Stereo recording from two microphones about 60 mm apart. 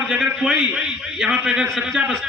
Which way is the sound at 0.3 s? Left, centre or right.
Centre.